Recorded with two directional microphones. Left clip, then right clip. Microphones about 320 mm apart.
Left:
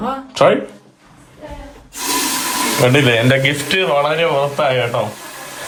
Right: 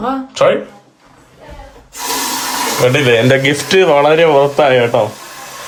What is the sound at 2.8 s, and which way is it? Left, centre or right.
Speech, centre.